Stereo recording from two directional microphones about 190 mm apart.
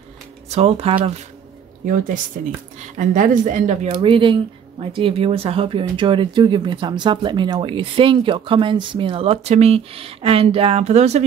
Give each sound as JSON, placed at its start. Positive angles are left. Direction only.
{"t": 0.5, "sound": "speech", "side_deg": -35}
{"t": 2.8, "sound": "speech", "side_deg": -40}
{"t": 4.0, "sound": "speech", "side_deg": -25}